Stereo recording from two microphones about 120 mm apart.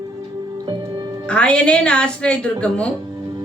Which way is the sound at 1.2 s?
10° left (ahead or behind).